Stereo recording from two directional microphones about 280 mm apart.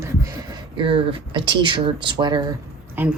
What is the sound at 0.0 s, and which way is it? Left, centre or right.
Speech, centre.